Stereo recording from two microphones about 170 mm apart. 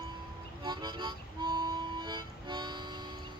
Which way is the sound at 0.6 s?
25° right (ahead or behind).